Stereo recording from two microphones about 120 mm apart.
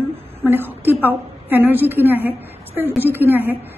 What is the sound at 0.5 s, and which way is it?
A woman's voice, 15° right (ahead or behind).